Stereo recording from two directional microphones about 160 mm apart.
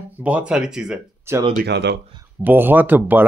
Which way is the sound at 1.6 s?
90° right.